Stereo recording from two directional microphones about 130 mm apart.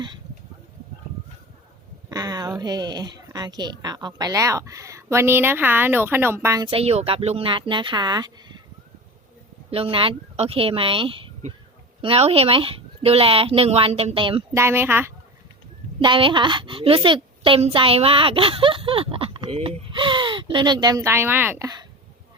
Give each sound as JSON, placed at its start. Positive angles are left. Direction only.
{"t": 2.0, "sound": "a sound", "side_deg": -30}
{"t": 2.6, "sound": "a woman's voice", "side_deg": -30}
{"t": 6.7, "sound": "speech", "side_deg": -50}
{"t": 9.6, "sound": "speech", "side_deg": -45}
{"t": 14.5, "sound": "a woman's voice", "side_deg": -20}
{"t": 16.0, "sound": "a woman's voice", "side_deg": -40}